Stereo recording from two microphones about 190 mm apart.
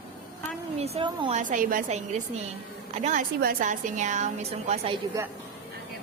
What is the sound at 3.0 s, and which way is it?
A woman's voice, 45° right (ahead or behind).